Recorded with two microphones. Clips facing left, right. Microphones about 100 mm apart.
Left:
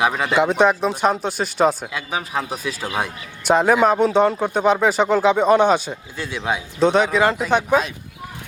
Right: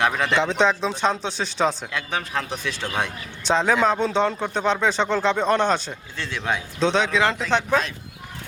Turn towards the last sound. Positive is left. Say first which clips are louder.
# left 4 dB
turn(degrees=10)  # may be behind; listen again after turning